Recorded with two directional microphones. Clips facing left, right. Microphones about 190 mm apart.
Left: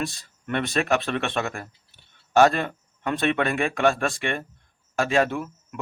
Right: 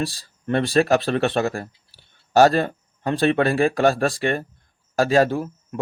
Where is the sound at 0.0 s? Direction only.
35° right (ahead or behind).